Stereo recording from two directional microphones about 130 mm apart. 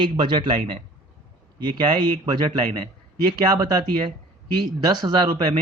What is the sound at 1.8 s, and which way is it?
Speech, 35° right (ahead or behind).